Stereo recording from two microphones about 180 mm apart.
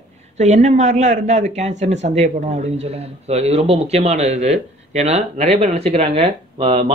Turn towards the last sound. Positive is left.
turn(degrees=-35)  # may be behind; listen again after turning